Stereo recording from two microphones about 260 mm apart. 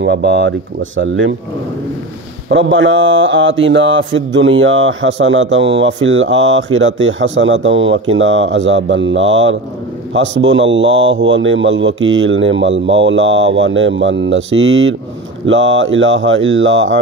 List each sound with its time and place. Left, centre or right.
0.0 s mantra: right
2.5 s mantra: right